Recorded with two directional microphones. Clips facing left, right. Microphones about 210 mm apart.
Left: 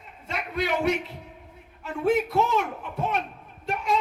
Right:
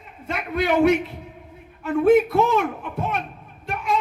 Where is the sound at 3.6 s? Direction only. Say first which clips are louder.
Right 1 dB; 55° right (ahead or behind).